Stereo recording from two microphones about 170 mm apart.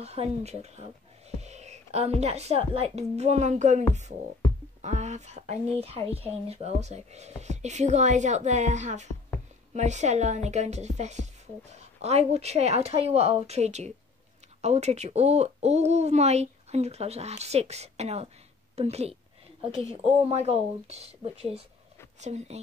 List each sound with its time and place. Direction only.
0.0 s a woman's voice: 40° right (ahead or behind)
4.8 s a woman's voice: 45° right (ahead or behind)